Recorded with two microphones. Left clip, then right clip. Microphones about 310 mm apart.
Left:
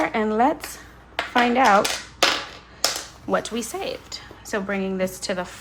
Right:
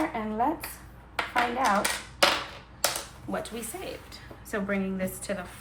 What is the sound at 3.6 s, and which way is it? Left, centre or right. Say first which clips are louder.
A woman's voice: left 9 dB; centre.